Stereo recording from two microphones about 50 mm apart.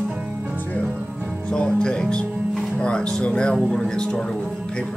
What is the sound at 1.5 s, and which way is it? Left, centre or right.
Music, centre.